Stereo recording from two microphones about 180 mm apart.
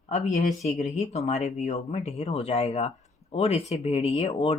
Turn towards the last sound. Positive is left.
turn(degrees=35)  # may be behind; listen again after turning